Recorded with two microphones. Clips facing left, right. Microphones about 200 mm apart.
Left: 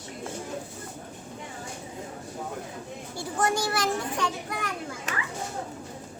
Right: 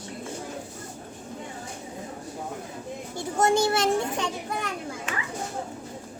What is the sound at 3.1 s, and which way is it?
Children playing, 25° right (ahead or behind).